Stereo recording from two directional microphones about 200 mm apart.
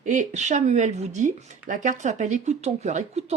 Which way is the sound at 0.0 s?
40° right (ahead or behind).